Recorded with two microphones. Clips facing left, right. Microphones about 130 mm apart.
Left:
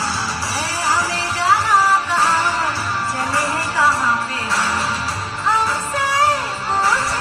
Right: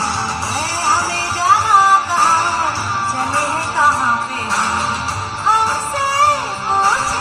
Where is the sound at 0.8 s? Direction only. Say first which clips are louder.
Right 2 dB; 30° right (ahead or behind).